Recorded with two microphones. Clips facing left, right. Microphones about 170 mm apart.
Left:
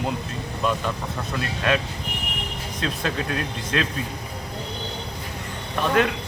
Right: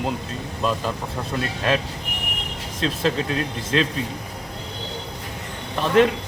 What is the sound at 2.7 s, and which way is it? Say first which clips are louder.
Speech: right 5 dB; 30° right (ahead or behind).